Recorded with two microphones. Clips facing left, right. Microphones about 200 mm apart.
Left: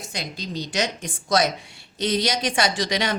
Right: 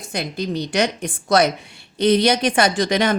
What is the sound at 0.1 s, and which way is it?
A woman's voice, 55° right (ahead or behind).